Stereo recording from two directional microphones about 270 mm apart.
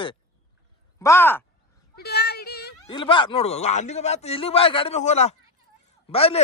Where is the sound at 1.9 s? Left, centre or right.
Left.